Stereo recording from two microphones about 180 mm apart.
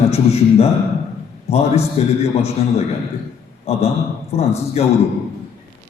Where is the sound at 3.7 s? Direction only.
35° left (ahead or behind).